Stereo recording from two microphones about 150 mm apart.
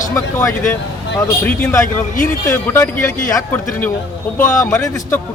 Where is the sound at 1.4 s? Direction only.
15° left (ahead or behind).